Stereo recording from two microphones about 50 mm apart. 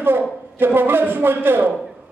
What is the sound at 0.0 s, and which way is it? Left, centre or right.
A man's voice, right.